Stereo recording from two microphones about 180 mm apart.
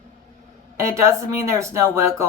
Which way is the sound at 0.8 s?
15° right (ahead or behind).